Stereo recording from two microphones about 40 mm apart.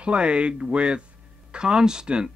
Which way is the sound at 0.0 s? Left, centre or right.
Right.